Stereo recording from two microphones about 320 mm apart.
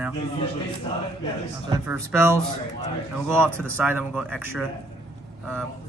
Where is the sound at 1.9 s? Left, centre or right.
Centre.